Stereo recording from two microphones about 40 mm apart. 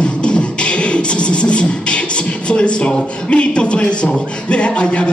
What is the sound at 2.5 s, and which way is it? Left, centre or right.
A man's voice, left.